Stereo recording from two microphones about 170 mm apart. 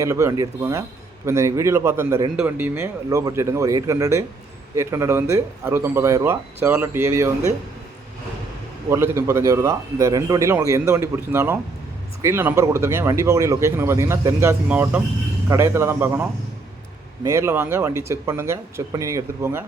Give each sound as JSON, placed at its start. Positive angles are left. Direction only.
{"t": 0.0, "sound": "speech", "side_deg": -20}
{"t": 8.9, "sound": "speech", "side_deg": -15}
{"t": 17.2, "sound": "speech", "side_deg": -15}